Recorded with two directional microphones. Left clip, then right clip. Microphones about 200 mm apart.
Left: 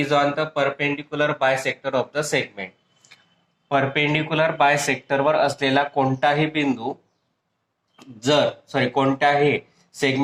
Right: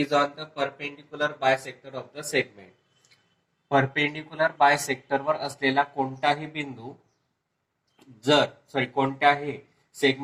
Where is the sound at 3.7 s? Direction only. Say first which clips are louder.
Left 3 dB; 40° left (ahead or behind).